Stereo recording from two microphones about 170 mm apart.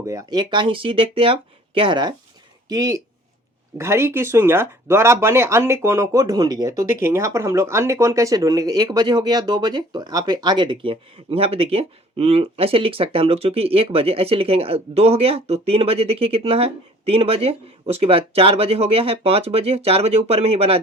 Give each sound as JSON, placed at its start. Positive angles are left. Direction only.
{"t": 0.0, "sound": "speech", "side_deg": -20}